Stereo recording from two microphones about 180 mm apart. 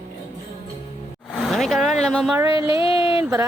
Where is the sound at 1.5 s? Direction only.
Centre (ahead or behind).